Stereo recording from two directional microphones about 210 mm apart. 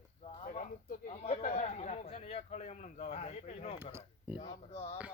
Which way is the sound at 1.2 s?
30° left (ahead or behind).